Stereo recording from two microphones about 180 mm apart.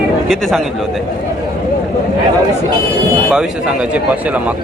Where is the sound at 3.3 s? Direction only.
5° right (ahead or behind).